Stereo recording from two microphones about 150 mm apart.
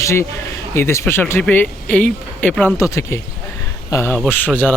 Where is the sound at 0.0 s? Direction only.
20° left (ahead or behind).